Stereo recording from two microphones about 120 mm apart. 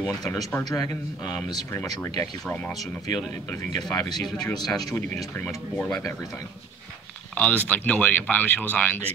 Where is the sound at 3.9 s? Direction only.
35° left (ahead or behind).